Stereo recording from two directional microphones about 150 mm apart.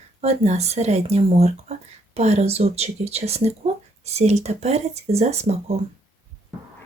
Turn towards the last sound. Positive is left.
turn(degrees=-45)  # may be behind; listen again after turning